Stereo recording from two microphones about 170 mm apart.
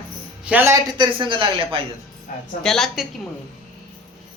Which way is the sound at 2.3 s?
55° left (ahead or behind).